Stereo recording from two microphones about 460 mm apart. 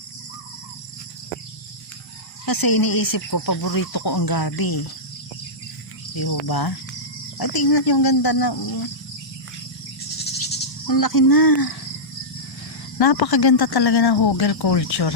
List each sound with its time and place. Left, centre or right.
2.5 s speech: left
6.1 s speech: left
10.8 s speech: left
13.0 s speech: left